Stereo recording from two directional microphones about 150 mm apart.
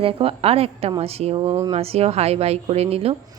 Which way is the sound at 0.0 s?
40° right (ahead or behind).